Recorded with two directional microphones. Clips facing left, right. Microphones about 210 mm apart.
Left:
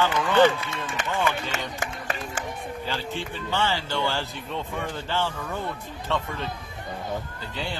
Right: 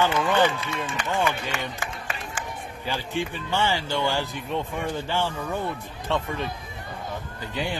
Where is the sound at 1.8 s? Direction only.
40° left (ahead or behind).